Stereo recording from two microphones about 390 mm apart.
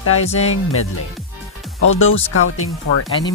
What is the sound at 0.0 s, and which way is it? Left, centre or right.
Speech, left.